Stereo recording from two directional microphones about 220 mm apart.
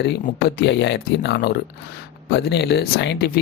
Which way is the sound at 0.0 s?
50° left (ahead or behind).